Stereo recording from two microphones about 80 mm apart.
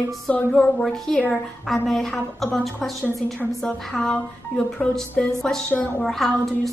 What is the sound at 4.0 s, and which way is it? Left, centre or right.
A woman's voice, centre.